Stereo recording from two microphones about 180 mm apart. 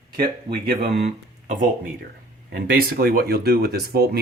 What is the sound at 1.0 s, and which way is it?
Speech, 45° right (ahead or behind).